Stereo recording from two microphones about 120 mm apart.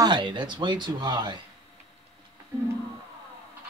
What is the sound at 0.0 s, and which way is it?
A man's voice, 40° right (ahead or behind).